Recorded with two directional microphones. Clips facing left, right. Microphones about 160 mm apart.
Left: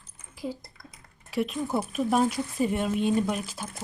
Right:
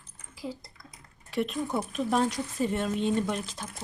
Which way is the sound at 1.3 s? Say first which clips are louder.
Left 2 dB; centre (ahead or behind).